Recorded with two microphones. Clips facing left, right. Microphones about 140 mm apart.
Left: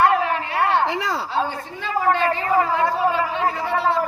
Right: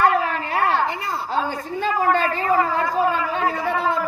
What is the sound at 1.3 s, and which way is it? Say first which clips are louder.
A woman's voice: right 1 dB; 40° right (ahead or behind).